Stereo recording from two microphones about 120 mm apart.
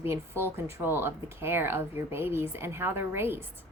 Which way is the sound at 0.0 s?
20° right (ahead or behind).